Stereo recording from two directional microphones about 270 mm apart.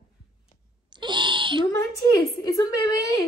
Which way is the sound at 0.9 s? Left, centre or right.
Centre.